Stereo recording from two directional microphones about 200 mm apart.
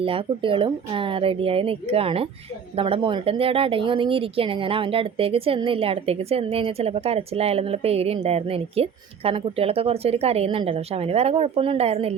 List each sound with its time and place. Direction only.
0.0 s a woman's voice: 25° right (ahead or behind)